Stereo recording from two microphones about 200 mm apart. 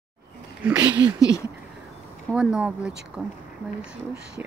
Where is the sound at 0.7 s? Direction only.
15° right (ahead or behind).